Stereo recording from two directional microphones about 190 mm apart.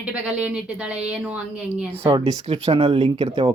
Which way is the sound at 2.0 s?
30° right (ahead or behind).